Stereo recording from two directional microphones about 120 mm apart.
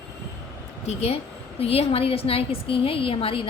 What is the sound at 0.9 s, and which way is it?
A woman's voice, 60° left (ahead or behind).